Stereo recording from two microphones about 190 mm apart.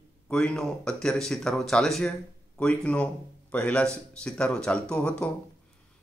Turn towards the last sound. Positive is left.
turn(degrees=5)  # may be behind; listen again after turning